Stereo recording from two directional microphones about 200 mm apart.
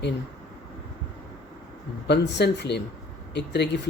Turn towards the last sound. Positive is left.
turn(degrees=60)  # may be behind; listen again after turning